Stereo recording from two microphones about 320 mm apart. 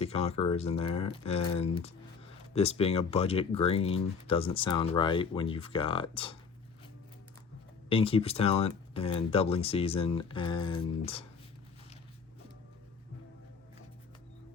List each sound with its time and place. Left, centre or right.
0.0 s speech: centre
7.9 s speech: centre